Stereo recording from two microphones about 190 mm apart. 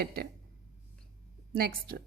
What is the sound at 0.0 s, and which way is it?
Speech, 55° right (ahead or behind).